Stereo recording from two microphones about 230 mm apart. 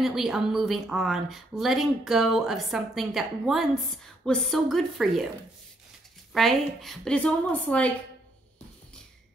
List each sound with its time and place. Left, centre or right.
0.0 s speech: centre
6.3 s speech: centre